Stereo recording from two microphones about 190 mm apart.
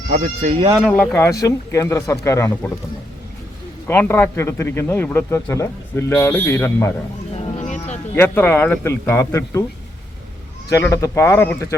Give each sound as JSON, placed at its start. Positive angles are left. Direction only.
{"t": 0.1, "sound": "speech", "side_deg": -40}
{"t": 0.8, "sound": "speech", "side_deg": 0}
{"t": 3.8, "sound": "speech", "side_deg": 10}
{"t": 7.3, "sound": "a sound", "side_deg": 35}
{"t": 8.1, "sound": "speech", "side_deg": 10}
{"t": 10.7, "sound": "speech", "side_deg": 15}